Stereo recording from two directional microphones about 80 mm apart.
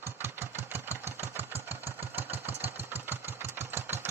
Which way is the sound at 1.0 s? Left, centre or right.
Right.